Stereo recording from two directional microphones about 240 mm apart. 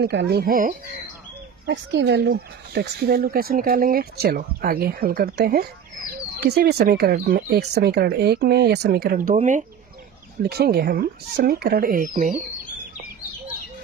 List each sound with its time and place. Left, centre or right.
0.0 s speech: right
1.7 s speech: right